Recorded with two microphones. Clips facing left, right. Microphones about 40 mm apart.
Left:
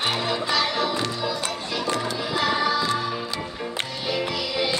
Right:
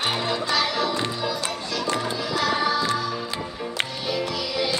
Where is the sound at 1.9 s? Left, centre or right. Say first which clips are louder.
Right 1 dB; centre.